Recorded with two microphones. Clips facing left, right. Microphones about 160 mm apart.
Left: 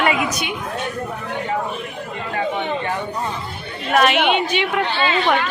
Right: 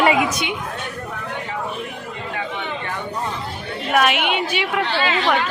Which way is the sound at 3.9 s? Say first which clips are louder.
Left 3 dB; 10° right (ahead or behind).